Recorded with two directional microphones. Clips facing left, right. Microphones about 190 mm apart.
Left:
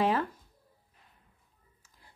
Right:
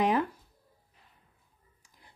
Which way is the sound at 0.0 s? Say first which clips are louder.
Right 1 dB; 15° right (ahead or behind).